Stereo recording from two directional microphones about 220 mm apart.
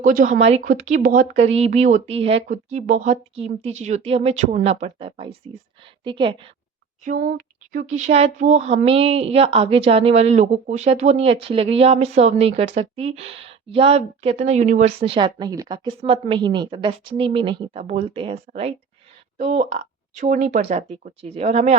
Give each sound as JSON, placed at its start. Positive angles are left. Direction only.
{"t": 0.0, "sound": "a woman's voice", "side_deg": -35}
{"t": 7.0, "sound": "a woman's voice", "side_deg": -40}